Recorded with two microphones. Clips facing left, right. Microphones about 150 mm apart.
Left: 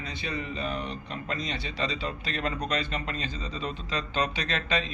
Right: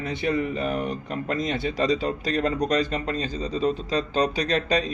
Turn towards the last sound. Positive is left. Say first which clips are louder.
# right 7 dB
turn(degrees=-40)  # may be behind; listen again after turning